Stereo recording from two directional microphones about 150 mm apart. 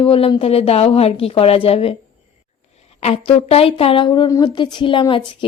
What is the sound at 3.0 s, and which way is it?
A woman's voice, 45° left (ahead or behind).